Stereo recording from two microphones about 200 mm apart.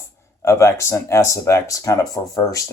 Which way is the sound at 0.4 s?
15° left (ahead or behind).